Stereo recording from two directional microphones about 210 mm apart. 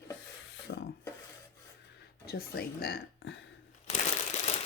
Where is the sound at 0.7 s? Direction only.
60° left (ahead or behind).